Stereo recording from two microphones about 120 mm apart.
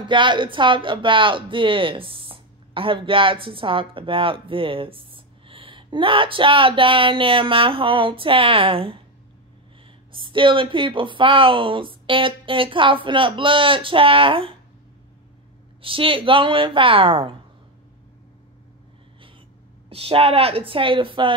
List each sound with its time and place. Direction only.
0.0 s speech: 40° right (ahead or behind)
10.1 s speech: 45° right (ahead or behind)
15.8 s speech: 45° right (ahead or behind)
19.9 s speech: 50° right (ahead or behind)